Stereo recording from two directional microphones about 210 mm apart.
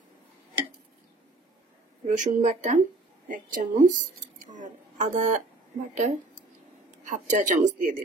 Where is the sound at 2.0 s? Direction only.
35° right (ahead or behind).